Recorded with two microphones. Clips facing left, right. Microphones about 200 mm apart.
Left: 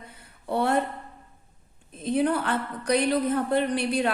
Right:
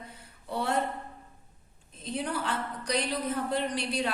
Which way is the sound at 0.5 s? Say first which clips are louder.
Left 6 dB; 60° left (ahead or behind).